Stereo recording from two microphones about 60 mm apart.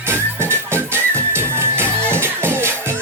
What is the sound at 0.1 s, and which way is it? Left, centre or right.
Music, right.